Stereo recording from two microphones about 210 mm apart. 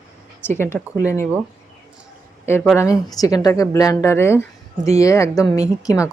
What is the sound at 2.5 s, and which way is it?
Speech, 10° left (ahead or behind).